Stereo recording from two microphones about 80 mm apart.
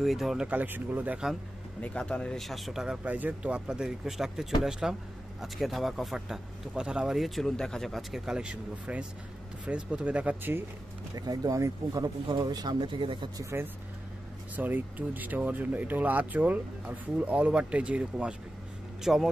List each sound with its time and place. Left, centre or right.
0.0 s speech: centre
0.5 s speech: right
1.8 s speech: centre
2.4 s speech: centre
3.0 s speech: centre
8.3 s speech: centre
11.1 s speech: right
12.4 s speech: right
13.4 s speech: right
14.5 s speech: right; by 19.3 s centre